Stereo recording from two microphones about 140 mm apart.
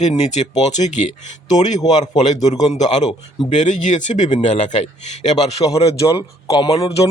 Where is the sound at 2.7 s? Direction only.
55° left (ahead or behind).